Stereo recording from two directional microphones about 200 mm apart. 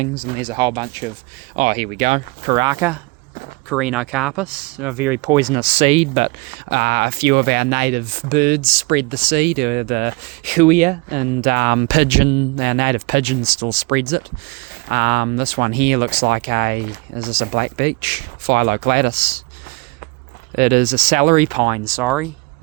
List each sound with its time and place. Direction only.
0.0 s speech: 30° right (ahead or behind)
1.5 s speech: 40° right (ahead or behind); by 2.8 s 20° right (ahead or behind)
3.7 s speech: 5° right (ahead or behind); by 6.3 s 35° right (ahead or behind)
6.7 s speech: 50° right (ahead or behind)
20.6 s speech: 45° right (ahead or behind)
21.7 s speech: 15° right (ahead or behind)
22.0 s speech: 5° right (ahead or behind)